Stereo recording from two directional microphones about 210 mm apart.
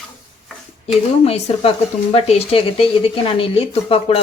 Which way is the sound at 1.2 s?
30° left (ahead or behind).